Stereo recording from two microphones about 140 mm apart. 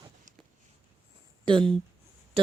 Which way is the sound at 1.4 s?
35° right (ahead or behind).